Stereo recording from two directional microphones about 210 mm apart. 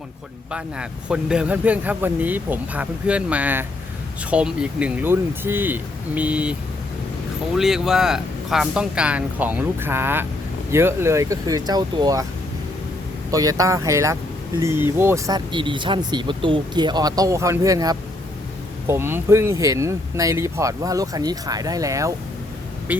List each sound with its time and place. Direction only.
0.5 s speech: 5° right (ahead or behind)
13.3 s speech: 15° right (ahead or behind)